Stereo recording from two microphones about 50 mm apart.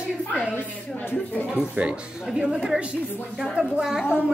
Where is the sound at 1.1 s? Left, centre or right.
Left.